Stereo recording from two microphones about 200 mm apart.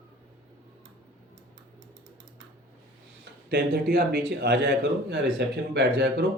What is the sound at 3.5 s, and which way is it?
A man's voice, 50° right (ahead or behind).